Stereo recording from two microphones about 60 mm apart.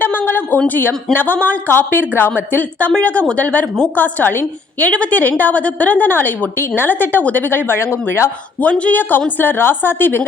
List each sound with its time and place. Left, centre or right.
0.0 s a sound: left
0.7 s a woman's voice: left
4.9 s a woman's voice: centre; by 8.3 s left
8.8 s a woman's voice: left